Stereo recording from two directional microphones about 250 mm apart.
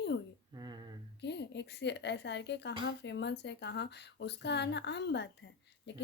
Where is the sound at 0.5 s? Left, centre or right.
Centre.